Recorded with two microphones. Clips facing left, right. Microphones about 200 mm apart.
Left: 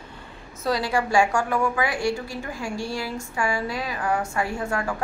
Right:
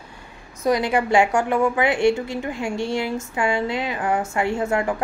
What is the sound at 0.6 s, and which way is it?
A woman's voice, 20° right (ahead or behind).